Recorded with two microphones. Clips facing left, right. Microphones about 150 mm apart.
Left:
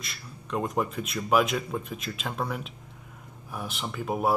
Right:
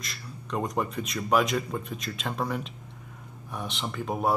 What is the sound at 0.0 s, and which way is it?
Speech, centre (ahead or behind).